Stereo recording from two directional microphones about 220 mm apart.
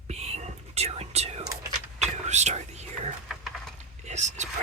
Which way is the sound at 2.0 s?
30° right (ahead or behind).